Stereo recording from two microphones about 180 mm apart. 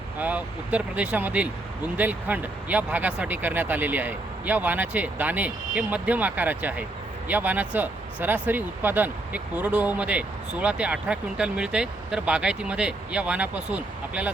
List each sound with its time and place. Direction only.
0.2 s speech: 10° right (ahead or behind)